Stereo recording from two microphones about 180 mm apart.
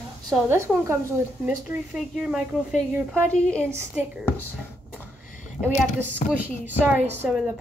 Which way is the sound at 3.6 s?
15° right (ahead or behind).